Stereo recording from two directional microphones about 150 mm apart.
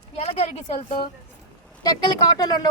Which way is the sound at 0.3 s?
40° left (ahead or behind).